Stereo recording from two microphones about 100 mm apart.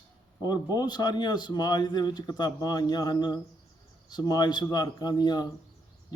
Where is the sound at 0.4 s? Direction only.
40° left (ahead or behind).